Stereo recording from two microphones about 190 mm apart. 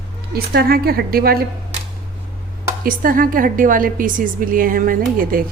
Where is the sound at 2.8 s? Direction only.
45° right (ahead or behind).